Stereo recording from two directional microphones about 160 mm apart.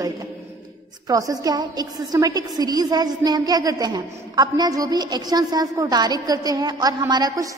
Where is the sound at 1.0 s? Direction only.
20° right (ahead or behind).